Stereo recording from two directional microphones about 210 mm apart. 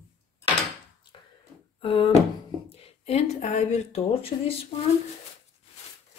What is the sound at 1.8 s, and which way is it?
Speech, 25° left (ahead or behind).